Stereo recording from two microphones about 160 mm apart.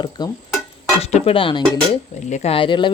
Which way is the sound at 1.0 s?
40° left (ahead or behind).